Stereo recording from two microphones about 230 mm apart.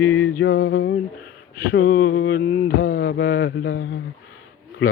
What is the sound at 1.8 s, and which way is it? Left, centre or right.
Mantra, left.